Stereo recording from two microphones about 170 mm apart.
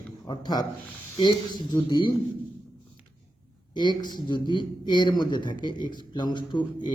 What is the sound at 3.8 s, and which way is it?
Speech, 25° left (ahead or behind).